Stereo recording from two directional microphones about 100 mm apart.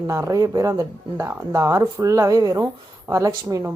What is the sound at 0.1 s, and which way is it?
Speech, 30° right (ahead or behind).